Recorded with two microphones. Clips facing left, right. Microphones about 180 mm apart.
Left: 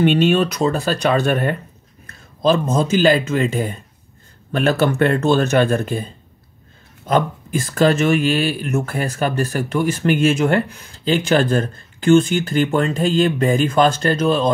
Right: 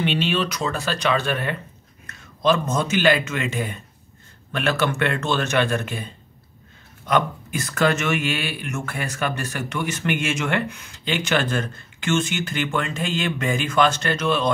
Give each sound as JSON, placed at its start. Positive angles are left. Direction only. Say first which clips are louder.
{"t": 0.0, "sound": "speech", "louder": "left 8 dB", "side_deg": 45}
{"t": 2.7, "sound": "speech", "louder": "left 5 dB", "side_deg": 35}